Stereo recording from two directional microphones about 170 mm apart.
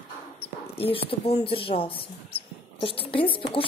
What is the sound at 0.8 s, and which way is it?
Speech, 35° left (ahead or behind).